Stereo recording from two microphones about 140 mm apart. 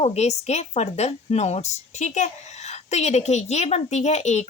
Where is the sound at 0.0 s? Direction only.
50° left (ahead or behind).